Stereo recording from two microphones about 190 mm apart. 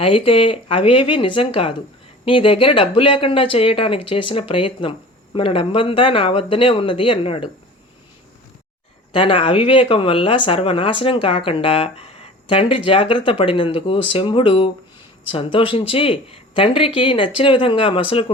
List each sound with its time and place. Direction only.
0.0 s speech: 30° left (ahead or behind)
9.1 s speech: 30° left (ahead or behind)